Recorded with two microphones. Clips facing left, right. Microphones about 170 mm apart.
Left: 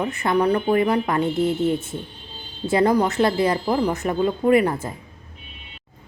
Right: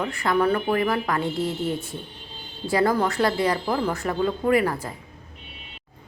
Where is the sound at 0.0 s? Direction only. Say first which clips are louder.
Left 2 dB; 20° left (ahead or behind).